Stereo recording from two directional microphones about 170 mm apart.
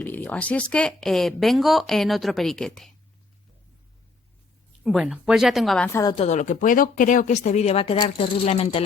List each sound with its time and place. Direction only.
0.0 s speech: 10° left (ahead or behind)
4.8 s speech: centre (ahead or behind)
5.9 s a woman's voice: 20° left (ahead or behind)
6.1 s speech: 40° left (ahead or behind)